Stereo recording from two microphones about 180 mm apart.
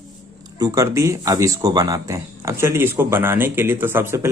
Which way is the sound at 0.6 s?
20° right (ahead or behind).